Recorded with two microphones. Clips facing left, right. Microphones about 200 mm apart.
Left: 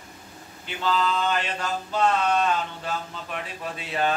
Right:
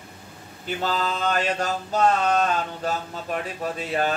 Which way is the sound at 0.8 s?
45° right (ahead or behind).